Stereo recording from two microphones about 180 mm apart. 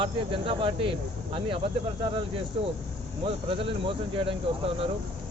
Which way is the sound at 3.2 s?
30° right (ahead or behind).